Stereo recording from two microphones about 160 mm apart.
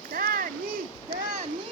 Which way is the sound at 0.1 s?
60° right (ahead or behind).